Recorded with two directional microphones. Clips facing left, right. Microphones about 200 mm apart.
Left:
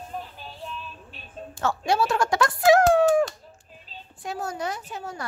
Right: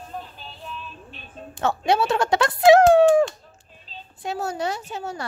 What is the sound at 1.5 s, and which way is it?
A woman's voice, 20° right (ahead or behind).